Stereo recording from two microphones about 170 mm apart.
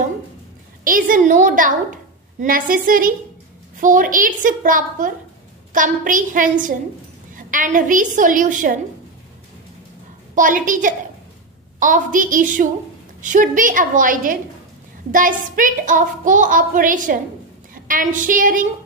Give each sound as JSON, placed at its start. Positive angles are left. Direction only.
{"t": 0.8, "sound": "a woman's voice", "side_deg": -55}
{"t": 10.3, "sound": "a woman's voice", "side_deg": -50}